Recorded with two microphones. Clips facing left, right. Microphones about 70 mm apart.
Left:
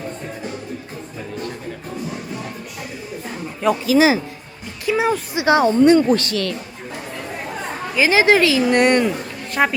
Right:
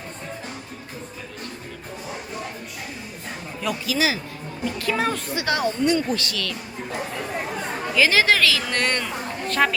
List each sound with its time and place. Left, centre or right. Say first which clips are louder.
3.6 s speech: left 9 dB; left
4.9 s speech: left 7 dB; centre
5.8 s speech: left 9 dB; left
7.9 s a woman's voice: left 4 dB; left